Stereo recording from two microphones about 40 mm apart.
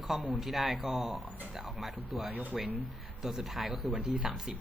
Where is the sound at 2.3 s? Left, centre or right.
Right.